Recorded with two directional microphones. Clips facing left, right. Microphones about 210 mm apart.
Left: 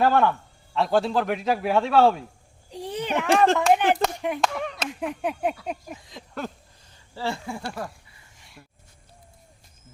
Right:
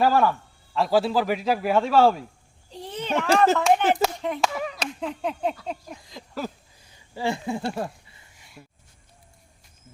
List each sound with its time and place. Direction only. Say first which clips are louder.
0.0 s a man's voice: even; centre (ahead or behind)
2.6 s a sound: left 1 dB; 15° left (ahead or behind)
3.2 s a man's voice: even; centre (ahead or behind)
4.9 s a sound: left 2 dB; 15° left (ahead or behind)
5.9 s a man's voice: even; centre (ahead or behind)
6.9 s speech: right 3 dB; 15° right (ahead or behind)
8.6 s music: right 3 dB; 20° right (ahead or behind)